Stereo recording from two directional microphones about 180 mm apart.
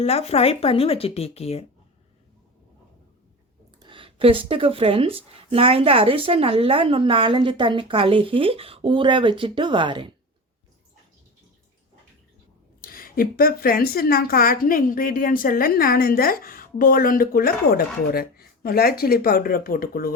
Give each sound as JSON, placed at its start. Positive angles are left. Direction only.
{"t": 0.0, "sound": "speech", "side_deg": 35}
{"t": 3.8, "sound": "speech", "side_deg": -25}
{"t": 12.8, "sound": "a woman's voice", "side_deg": 50}